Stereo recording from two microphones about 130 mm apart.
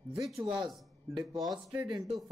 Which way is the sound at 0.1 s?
5° right (ahead or behind).